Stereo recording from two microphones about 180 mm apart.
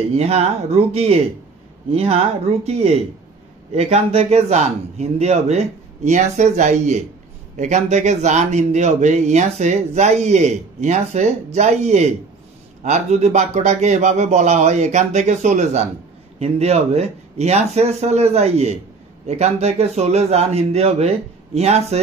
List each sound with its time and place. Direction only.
0.2 s a man's voice: 35° right (ahead or behind)